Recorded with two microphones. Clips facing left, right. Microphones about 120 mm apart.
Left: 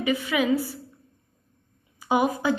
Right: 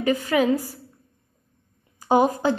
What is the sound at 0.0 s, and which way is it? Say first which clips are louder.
Speech: right 4 dB; 45° right (ahead or behind).